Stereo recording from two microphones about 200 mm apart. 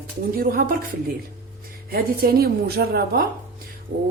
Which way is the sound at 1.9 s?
50° right (ahead or behind).